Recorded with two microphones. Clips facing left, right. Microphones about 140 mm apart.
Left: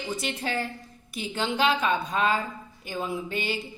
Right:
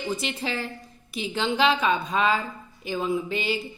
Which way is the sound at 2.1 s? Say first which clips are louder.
Right 2 dB; 45° left (ahead or behind).